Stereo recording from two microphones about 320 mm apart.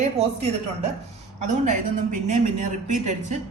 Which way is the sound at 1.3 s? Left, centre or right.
Right.